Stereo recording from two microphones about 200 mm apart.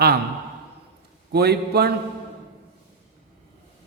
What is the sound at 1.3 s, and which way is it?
Speech, 55° right (ahead or behind).